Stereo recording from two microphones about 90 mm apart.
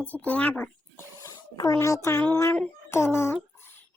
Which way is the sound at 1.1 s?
35° left (ahead or behind).